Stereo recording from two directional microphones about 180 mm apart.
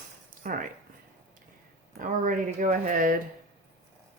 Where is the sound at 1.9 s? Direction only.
50° right (ahead or behind).